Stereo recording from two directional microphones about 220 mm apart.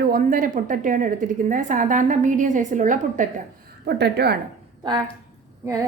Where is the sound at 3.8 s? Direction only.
50° right (ahead or behind).